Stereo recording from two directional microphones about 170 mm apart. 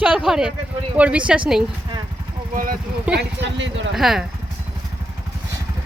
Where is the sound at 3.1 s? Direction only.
90° right.